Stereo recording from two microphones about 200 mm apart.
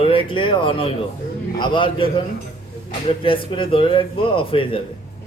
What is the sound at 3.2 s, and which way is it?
A man's voice, 25° left (ahead or behind).